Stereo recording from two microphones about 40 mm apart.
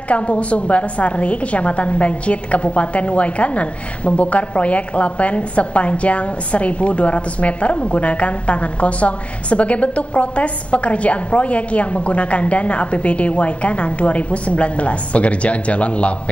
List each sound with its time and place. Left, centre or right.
0.1 s a woman's voice: left